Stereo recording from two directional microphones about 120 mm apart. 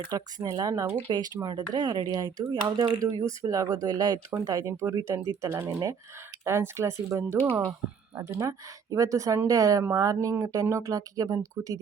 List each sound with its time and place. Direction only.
0.1 s speech: 30° right (ahead or behind)
3.0 s speech: 30° right (ahead or behind)